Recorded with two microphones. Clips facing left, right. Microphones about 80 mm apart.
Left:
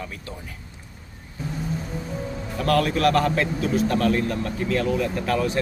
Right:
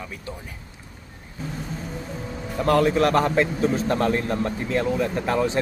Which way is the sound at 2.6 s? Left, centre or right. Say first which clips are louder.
Right 2 dB; right.